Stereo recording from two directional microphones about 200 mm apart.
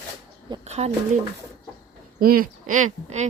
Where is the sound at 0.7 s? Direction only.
30° right (ahead or behind).